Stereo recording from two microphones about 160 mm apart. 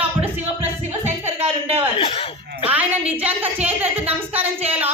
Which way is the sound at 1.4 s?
40° right (ahead or behind).